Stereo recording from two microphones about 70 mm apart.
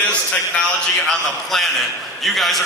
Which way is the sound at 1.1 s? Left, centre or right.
Centre.